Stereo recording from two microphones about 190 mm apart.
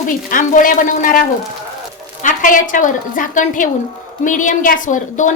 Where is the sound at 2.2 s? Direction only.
45° left (ahead or behind).